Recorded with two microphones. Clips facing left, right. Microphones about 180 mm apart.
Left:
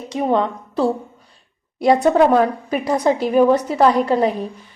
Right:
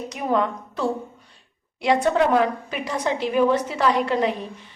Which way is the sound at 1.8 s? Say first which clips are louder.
Left 6 dB; 40° left (ahead or behind).